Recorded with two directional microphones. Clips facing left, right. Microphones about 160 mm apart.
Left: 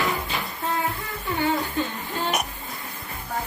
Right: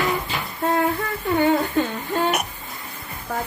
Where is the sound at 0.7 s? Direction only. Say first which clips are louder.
Right 7 dB; 65° right (ahead or behind).